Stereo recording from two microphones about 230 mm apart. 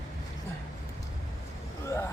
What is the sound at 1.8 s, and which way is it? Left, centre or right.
Vehicle, centre.